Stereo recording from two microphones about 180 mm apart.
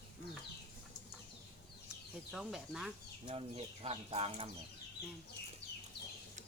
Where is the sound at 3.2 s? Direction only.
35° right (ahead or behind).